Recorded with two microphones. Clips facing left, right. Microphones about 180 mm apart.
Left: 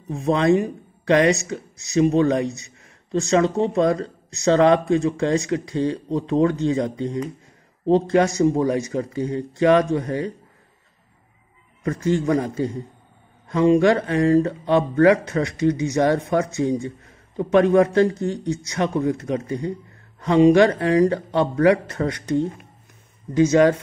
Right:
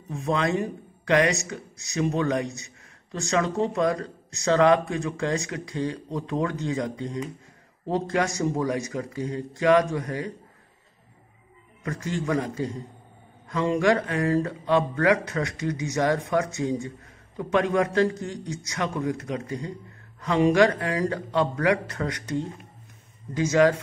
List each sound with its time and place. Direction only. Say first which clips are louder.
0.1 s speech: left 7 dB; 30° left (ahead or behind)
11.8 s speech: left 8 dB; 25° left (ahead or behind)